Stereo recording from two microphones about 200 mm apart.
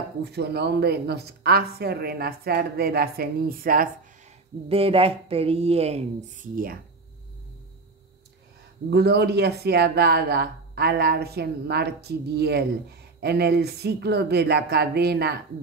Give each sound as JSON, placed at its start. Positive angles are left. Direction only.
{"t": 0.2, "sound": "speech", "side_deg": -55}
{"t": 4.6, "sound": "a woman's voice", "side_deg": -30}
{"t": 6.5, "sound": "speech", "side_deg": -45}
{"t": 8.9, "sound": "speech", "side_deg": -55}